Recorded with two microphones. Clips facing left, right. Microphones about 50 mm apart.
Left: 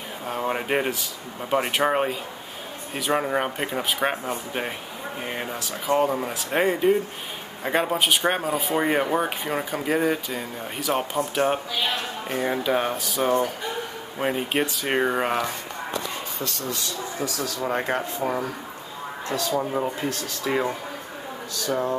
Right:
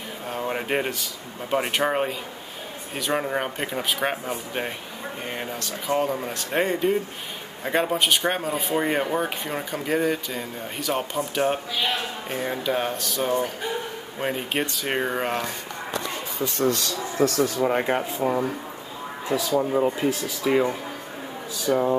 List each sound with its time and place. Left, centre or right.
0.3 s speech: centre
16.7 s speech: right
17.6 s speech: centre
18.2 s speech: centre
21.6 s speech: centre